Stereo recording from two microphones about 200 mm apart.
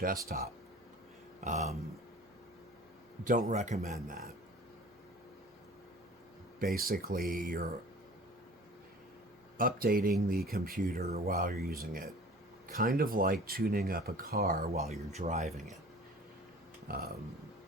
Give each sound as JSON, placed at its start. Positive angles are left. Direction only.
{"t": 0.3, "sound": "speech", "side_deg": -45}
{"t": 1.5, "sound": "speech", "side_deg": -35}
{"t": 3.2, "sound": "speech", "side_deg": -40}
{"t": 6.6, "sound": "speech", "side_deg": -45}
{"t": 9.6, "sound": "speech", "side_deg": -45}
{"t": 14.8, "sound": "speech", "side_deg": -35}
{"t": 16.9, "sound": "speech", "side_deg": -45}